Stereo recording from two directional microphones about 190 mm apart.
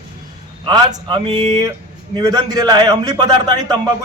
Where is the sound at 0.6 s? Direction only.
25° right (ahead or behind).